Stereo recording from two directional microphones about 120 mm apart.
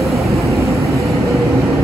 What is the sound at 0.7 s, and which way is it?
Vehicle, 25° right (ahead or behind).